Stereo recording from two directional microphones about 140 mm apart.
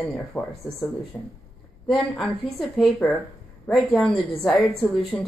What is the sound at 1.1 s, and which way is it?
Speech, 30° left (ahead or behind).